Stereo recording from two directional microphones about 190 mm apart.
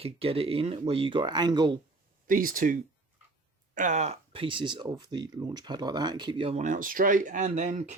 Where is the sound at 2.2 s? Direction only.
45° right (ahead or behind).